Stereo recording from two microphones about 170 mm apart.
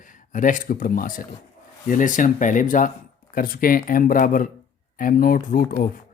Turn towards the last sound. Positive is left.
turn(degrees=55)  # may be behind; listen again after turning